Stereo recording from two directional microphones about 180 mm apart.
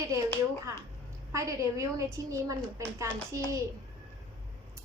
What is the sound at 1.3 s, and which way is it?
A child's voice, 15° right (ahead or behind).